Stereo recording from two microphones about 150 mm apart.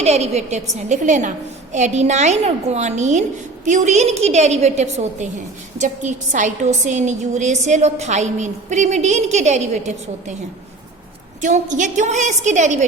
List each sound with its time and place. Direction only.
0.0 s a woman's voice: 45° right (ahead or behind)
11.3 s a woman's voice: 55° right (ahead or behind)